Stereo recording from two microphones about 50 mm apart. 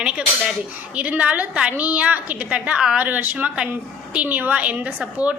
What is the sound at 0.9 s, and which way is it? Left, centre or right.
A woman's voice, right.